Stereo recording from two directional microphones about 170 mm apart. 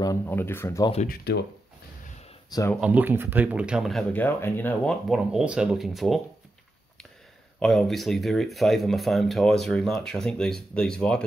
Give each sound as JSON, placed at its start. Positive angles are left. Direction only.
{"t": 0.2, "sound": "speech", "side_deg": 10}
{"t": 1.0, "sound": "speech", "side_deg": 65}
{"t": 2.7, "sound": "speech", "side_deg": -5}
{"t": 4.1, "sound": "speech", "side_deg": 10}
{"t": 5.1, "sound": "speech", "side_deg": -5}
{"t": 7.6, "sound": "speech", "side_deg": 0}